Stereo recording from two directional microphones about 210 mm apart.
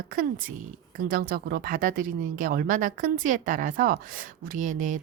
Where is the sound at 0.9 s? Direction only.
40° right (ahead or behind).